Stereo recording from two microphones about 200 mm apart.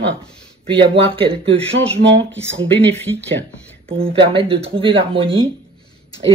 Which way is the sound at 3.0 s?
10° left (ahead or behind).